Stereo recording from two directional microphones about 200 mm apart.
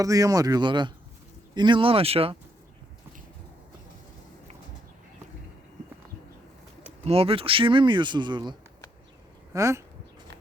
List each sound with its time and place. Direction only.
0.0 s speech: 15° right (ahead or behind)
7.0 s speech: 30° right (ahead or behind); by 9.8 s 15° right (ahead or behind)